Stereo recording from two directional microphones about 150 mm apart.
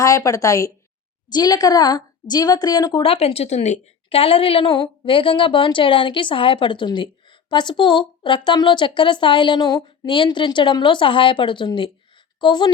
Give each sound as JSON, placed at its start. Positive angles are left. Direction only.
{"t": 0.0, "sound": "a woman's voice", "side_deg": 20}